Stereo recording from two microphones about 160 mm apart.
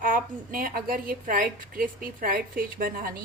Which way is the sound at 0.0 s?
60° right (ahead or behind).